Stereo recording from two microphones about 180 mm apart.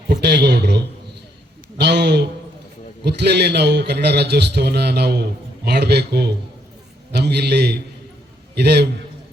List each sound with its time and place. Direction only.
0.1 s a man's voice: 70° right (ahead or behind)
1.8 s a man's voice: 70° right (ahead or behind)